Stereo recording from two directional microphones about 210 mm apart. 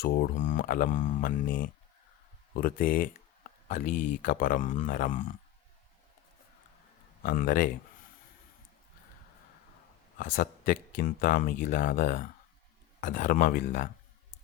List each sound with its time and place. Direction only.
0.0 s speech: 40° left (ahead or behind)
7.2 s speech: 40° left (ahead or behind)
10.2 s speech: 45° left (ahead or behind)